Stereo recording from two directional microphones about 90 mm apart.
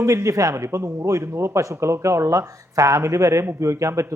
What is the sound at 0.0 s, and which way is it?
Speech, 35° right (ahead or behind).